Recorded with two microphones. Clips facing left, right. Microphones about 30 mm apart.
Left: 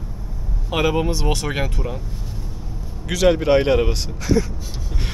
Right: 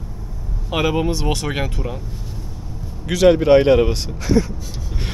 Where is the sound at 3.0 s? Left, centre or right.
Centre.